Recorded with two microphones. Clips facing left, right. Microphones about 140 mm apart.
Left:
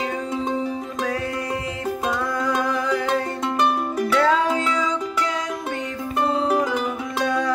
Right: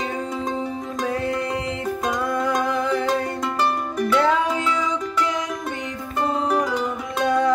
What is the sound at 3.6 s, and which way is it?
Music, 5° left (ahead or behind).